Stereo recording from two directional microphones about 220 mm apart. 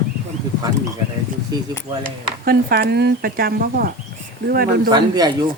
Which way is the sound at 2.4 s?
45° right (ahead or behind).